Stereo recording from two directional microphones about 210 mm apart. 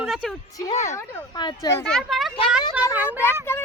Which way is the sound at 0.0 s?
Centre (ahead or behind).